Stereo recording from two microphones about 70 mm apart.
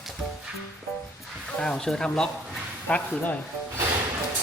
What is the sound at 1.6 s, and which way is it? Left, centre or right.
Speech, centre.